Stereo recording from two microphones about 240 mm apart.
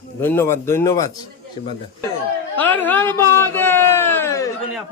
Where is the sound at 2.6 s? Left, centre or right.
Centre.